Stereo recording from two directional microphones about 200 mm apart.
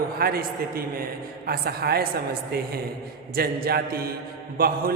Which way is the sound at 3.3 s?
50° right (ahead or behind).